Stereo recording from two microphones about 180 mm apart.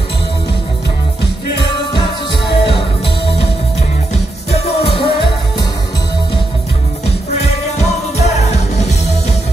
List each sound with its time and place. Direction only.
1.6 s music: 30° left (ahead or behind)
4.1 s music: 35° left (ahead or behind)
7.1 s music: 35° left (ahead or behind)